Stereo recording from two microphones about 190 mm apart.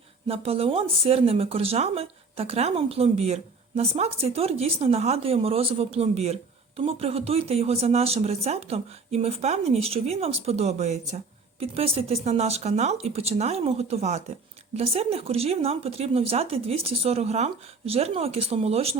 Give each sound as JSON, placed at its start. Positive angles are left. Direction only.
{"t": 0.3, "sound": "speech", "side_deg": -30}